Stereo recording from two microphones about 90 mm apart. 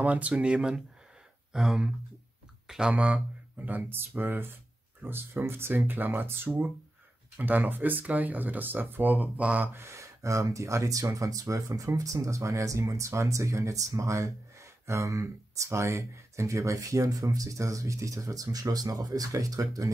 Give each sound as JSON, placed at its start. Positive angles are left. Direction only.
{"t": 0.0, "sound": "speech", "side_deg": -15}